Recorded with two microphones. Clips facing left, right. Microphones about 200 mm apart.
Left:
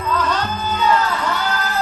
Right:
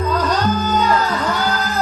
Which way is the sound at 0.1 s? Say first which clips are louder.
Right 1 dB; 40° right (ahead or behind).